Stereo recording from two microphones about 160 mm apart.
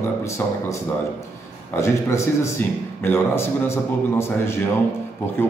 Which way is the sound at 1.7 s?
15° left (ahead or behind).